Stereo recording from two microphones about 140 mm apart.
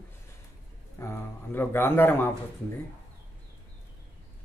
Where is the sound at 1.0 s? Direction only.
15° left (ahead or behind).